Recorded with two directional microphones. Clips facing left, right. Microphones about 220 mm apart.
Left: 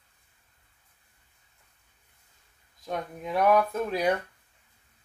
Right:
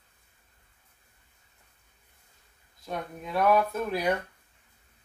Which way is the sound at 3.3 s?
15° left (ahead or behind).